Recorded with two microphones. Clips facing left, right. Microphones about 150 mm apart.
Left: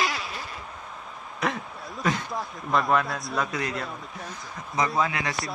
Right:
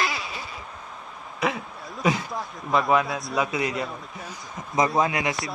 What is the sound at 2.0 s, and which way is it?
Speech, centre (ahead or behind).